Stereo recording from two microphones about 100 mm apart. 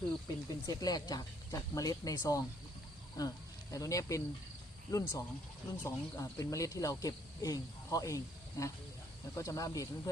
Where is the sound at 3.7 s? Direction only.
35° left (ahead or behind).